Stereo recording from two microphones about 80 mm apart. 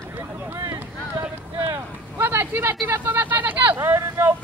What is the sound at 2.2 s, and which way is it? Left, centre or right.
Vehicle, right.